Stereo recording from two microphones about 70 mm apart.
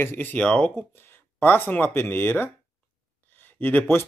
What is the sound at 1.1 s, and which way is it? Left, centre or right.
Speech, left.